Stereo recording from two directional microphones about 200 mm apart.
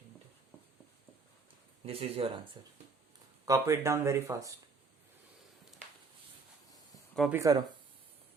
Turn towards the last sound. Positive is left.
turn(degrees=-15)  # may be behind; listen again after turning